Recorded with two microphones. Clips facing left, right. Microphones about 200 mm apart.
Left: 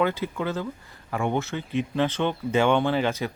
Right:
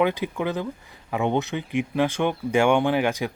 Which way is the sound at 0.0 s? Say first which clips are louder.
Right 2 dB; 15° right (ahead or behind).